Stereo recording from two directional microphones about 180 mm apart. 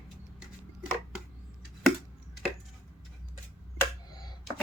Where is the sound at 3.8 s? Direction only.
20° left (ahead or behind).